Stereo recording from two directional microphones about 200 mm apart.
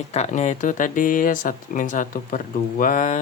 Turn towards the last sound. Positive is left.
turn(degrees=40)  # may be behind; listen again after turning